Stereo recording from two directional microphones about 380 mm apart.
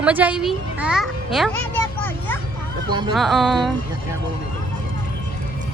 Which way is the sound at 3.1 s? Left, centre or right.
Centre.